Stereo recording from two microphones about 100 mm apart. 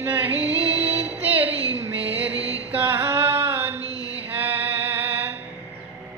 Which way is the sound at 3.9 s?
40° left (ahead or behind).